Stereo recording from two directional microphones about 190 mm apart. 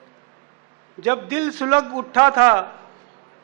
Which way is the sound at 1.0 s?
10° right (ahead or behind).